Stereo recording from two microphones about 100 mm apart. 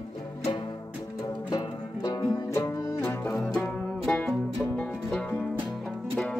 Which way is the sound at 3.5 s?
10° left (ahead or behind).